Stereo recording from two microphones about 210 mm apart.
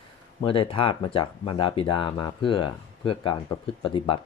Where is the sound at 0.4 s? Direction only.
25° left (ahead or behind).